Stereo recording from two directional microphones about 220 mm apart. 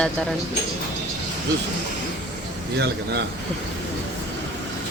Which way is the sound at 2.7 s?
50° right (ahead or behind).